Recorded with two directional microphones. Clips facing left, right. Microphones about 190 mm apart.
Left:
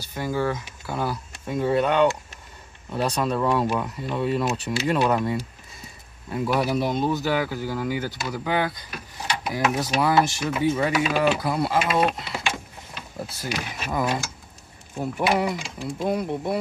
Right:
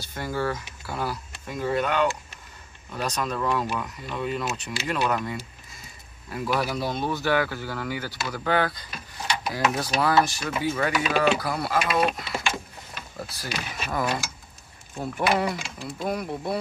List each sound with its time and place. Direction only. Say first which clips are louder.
0.1 s speech: left 3 dB; 15° left (ahead or behind)